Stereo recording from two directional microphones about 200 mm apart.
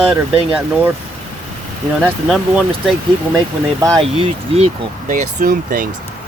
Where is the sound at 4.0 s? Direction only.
25° right (ahead or behind).